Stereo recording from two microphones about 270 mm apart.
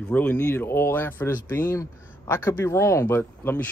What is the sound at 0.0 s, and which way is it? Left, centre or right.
Speech, centre.